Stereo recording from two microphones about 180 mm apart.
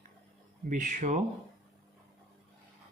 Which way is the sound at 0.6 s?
45° right (ahead or behind).